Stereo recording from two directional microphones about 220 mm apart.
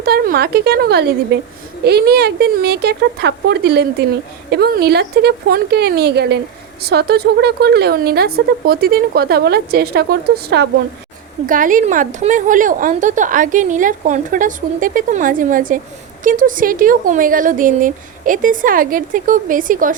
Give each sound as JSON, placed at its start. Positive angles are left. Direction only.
{"t": 0.0, "sound": "a woman's voice", "side_deg": -45}
{"t": 11.4, "sound": "a woman's voice", "side_deg": -35}